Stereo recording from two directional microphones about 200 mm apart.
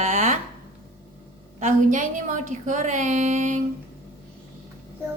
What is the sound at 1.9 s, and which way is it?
A woman's voice, 40° right (ahead or behind).